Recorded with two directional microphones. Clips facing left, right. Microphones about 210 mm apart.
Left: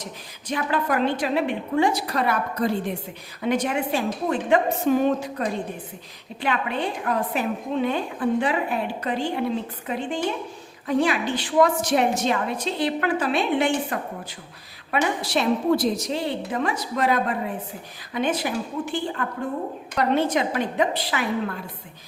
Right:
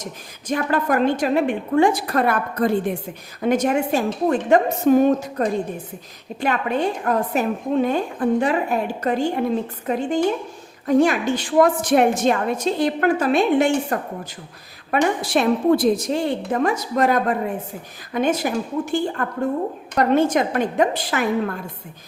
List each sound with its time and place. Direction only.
0.0 s a woman's voice: 45° right (ahead or behind)